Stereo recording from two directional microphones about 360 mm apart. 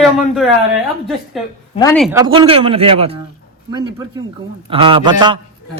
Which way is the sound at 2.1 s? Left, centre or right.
Centre.